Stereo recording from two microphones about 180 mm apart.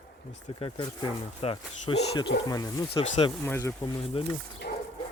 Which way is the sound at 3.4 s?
15° left (ahead or behind).